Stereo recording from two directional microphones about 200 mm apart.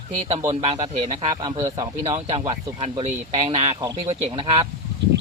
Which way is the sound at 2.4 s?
20° right (ahead or behind).